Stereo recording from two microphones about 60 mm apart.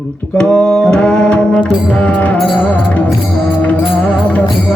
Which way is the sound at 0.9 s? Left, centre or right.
Centre.